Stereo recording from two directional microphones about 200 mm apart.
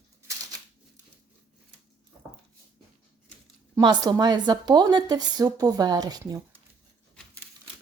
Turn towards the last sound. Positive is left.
turn(degrees=-15)  # may be behind; listen again after turning